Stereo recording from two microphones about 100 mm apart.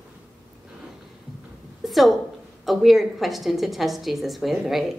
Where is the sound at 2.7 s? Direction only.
Centre (ahead or behind).